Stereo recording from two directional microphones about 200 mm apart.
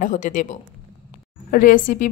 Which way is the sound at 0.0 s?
40° left (ahead or behind).